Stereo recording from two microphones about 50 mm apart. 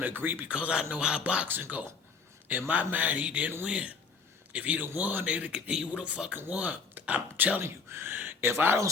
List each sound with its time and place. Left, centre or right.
0.0 s speech: right
0.4 s a man's voice: right
1.5 s speech: right
2.5 s a man's voice: right
5.2 s a man's voice: right
7.6 s speech: right